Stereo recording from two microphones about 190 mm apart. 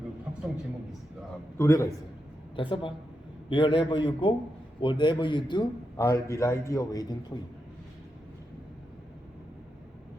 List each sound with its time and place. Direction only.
1.5 s a man's voice: 15° left (ahead or behind)
2.6 s a man's voice: 25° left (ahead or behind)